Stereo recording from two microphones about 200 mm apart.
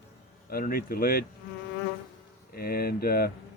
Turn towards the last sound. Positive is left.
turn(degrees=50)  # may be behind; listen again after turning